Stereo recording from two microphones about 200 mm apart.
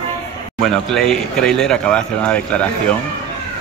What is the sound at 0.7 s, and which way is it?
Speech, centre (ahead or behind).